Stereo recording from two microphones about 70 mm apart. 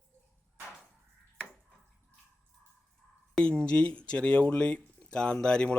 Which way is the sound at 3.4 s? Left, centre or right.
Centre.